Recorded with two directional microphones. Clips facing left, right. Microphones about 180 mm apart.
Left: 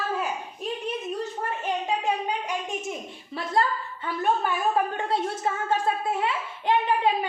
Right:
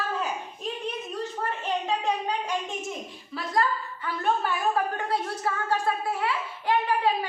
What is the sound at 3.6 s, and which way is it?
Speech, 25° left (ahead or behind).